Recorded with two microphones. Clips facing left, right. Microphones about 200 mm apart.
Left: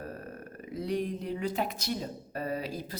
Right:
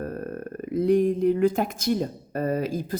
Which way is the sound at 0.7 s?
50° right (ahead or behind).